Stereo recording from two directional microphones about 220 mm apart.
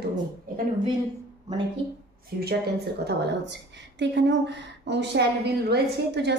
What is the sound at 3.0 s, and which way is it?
A woman's voice, 50° right (ahead or behind).